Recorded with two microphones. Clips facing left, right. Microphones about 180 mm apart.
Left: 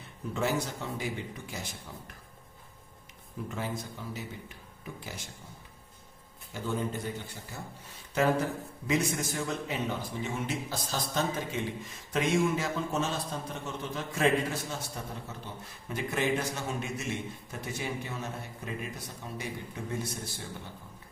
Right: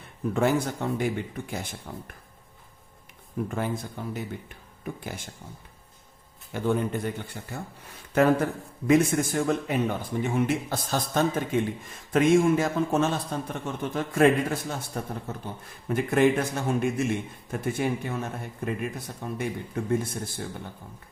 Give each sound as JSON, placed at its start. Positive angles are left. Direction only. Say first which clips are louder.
{"t": 0.3, "sound": "a man's voice", "louder": "right 6 dB", "side_deg": -55}
{"t": 3.5, "sound": "a man's voice", "louder": "right 3 dB", "side_deg": -55}
{"t": 6.5, "sound": "a man's voice", "louder": "right 7 dB", "side_deg": -60}